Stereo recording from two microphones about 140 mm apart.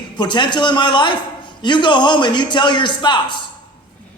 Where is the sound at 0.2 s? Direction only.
35° left (ahead or behind).